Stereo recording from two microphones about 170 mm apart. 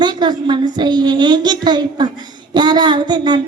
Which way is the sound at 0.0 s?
25° right (ahead or behind).